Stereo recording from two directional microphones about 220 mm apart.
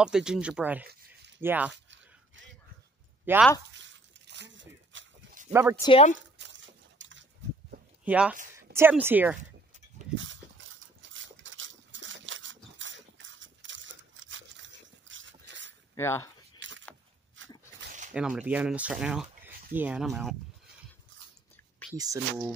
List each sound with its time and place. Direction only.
0.0 s speech: 5° right (ahead or behind)
3.3 s speech: 10° right (ahead or behind)
3.7 s a sound: 55° right (ahead or behind)
5.5 s speech: 10° right (ahead or behind)
5.8 s speech: 25° left (ahead or behind)
6.3 s a sound: 55° right (ahead or behind)
8.0 s speech: 5° right (ahead or behind)
10.1 s dog: 60° right (ahead or behind)
15.9 s speech: 10° left (ahead or behind)
16.5 s keys jangling: 55° right (ahead or behind)
17.4 s dog: 60° right (ahead or behind)
18.1 s speech: 5° right (ahead or behind)
21.9 s speech: 15° right (ahead or behind)